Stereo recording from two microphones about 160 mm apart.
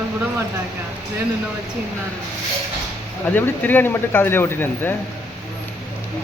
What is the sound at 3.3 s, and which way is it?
Speech, 10° left (ahead or behind).